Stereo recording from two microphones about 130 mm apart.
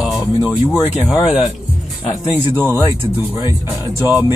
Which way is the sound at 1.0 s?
Centre (ahead or behind).